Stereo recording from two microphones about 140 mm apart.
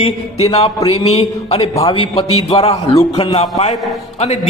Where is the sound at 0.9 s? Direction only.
45° left (ahead or behind).